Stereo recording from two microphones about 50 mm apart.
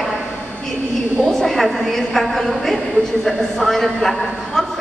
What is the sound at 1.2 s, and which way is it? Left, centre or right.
A woman's voice, centre.